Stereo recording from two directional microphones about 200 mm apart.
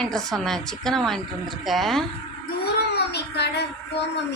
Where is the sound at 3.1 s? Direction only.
55° left (ahead or behind).